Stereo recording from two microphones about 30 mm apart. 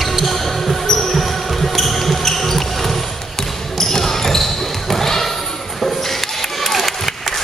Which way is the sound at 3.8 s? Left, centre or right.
Centre.